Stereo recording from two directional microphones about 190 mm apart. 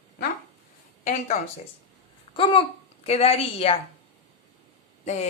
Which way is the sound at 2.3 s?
30° left (ahead or behind).